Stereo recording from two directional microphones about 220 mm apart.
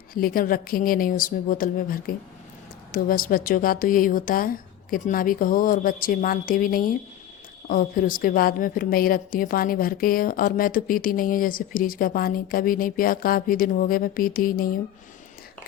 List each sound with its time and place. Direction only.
0.1 s a woman's voice: 40° left (ahead or behind)